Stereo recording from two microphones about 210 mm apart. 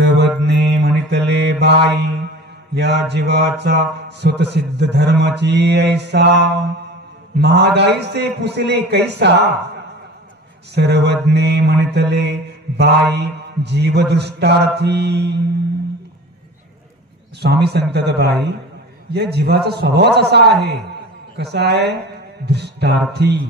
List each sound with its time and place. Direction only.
0.4 s mantra: 55° right (ahead or behind)
2.7 s speech: 55° right (ahead or behind)
10.7 s speech: 55° right (ahead or behind)
17.4 s speech: 50° right (ahead or behind)